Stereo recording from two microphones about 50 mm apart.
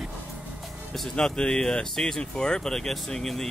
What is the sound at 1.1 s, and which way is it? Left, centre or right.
Speech, centre.